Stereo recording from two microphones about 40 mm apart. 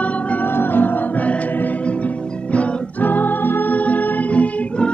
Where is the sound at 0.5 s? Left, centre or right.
Left.